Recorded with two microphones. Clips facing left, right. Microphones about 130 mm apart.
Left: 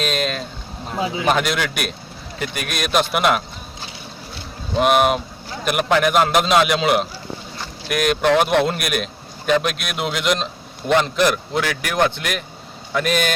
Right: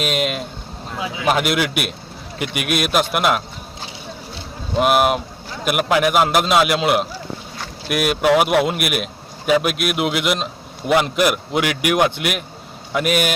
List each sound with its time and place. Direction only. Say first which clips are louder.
0.0 s speech: right 1 dB; 10° right (ahead or behind)
0.9 s speech: left 4 dB; 30° left (ahead or behind)
1.2 s a man's voice: right 3 dB; 5° right (ahead or behind)
4.7 s a man's voice: even; 5° right (ahead or behind)